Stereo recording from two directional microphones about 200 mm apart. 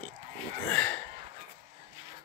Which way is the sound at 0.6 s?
5° left (ahead or behind).